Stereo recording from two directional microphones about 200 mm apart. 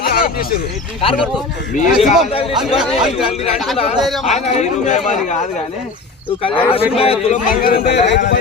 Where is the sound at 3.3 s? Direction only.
30° left (ahead or behind).